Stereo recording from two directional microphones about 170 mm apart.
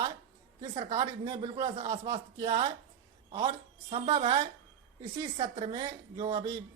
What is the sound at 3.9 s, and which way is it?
A woman's voice, 35° right (ahead or behind).